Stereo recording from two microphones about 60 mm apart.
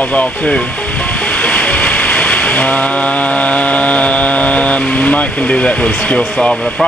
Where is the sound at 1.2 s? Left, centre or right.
Centre.